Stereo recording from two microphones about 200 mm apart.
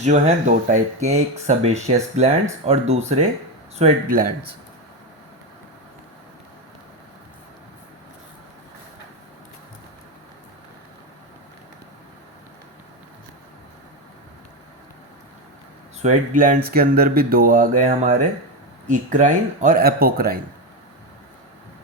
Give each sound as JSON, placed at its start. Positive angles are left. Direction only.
{"t": 0.0, "sound": "speech", "side_deg": -35}
{"t": 16.0, "sound": "a man's voice", "side_deg": -40}